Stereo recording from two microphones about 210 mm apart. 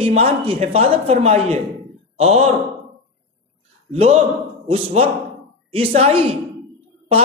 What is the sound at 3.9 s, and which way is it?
A man's voice, 30° right (ahead or behind).